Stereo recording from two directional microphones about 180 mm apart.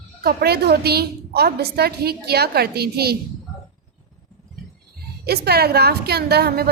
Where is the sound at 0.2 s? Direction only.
60° right (ahead or behind).